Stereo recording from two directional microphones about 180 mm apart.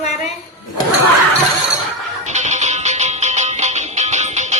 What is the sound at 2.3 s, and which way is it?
Music, 40° right (ahead or behind).